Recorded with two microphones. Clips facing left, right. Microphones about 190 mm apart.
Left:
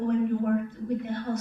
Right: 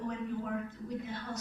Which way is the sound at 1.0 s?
55° left (ahead or behind).